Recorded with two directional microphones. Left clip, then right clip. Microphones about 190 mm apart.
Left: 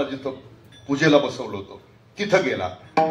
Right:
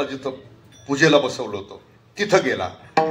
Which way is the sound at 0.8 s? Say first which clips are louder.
Right 2 dB; 35° right (ahead or behind).